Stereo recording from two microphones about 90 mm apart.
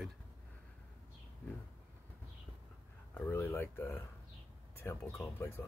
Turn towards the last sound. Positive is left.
turn(degrees=30)  # may be behind; listen again after turning